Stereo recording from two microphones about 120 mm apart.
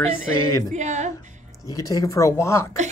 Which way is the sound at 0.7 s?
75° right (ahead or behind).